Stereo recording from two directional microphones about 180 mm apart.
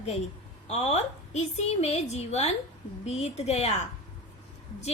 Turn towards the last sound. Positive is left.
turn(degrees=35)  # may be behind; listen again after turning